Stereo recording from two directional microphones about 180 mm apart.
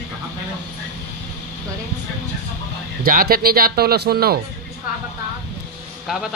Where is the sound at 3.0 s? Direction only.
55° right (ahead or behind).